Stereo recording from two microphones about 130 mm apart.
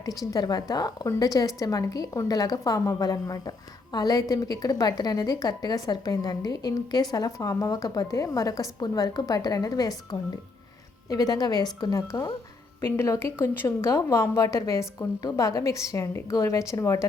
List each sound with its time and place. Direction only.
0.3 s a woman's voice: 30° left (ahead or behind)
11.1 s a woman's voice: 30° left (ahead or behind)